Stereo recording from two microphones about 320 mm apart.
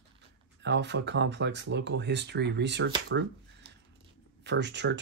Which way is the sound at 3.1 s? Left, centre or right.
Right.